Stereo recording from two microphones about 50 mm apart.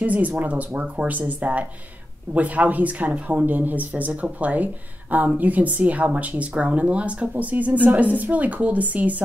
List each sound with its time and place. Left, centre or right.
0.0 s speech: right